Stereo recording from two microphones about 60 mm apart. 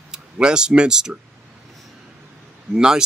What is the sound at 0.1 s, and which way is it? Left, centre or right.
Speech, centre.